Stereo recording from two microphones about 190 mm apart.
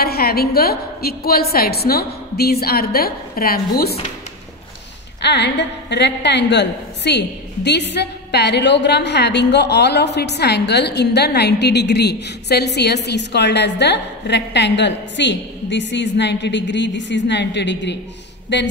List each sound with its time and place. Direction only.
0.0 s a woman's voice: 55° left (ahead or behind)
5.2 s a woman's voice: 65° left (ahead or behind)